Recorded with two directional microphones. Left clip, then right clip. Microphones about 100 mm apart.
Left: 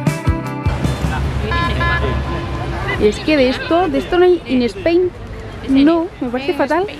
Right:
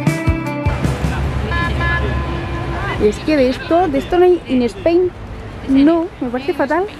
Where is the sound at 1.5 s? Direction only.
20° left (ahead or behind).